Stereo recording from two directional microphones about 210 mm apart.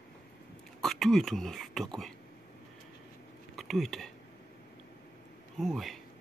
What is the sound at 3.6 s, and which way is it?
Speech, centre (ahead or behind).